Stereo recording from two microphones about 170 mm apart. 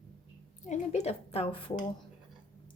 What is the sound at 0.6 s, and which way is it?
A woman's voice, 45° left (ahead or behind).